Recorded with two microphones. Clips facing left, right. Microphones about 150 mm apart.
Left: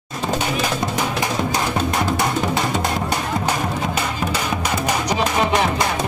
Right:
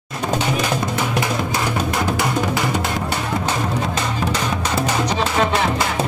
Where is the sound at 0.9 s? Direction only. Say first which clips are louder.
Right 1 dB; 20° left (ahead or behind).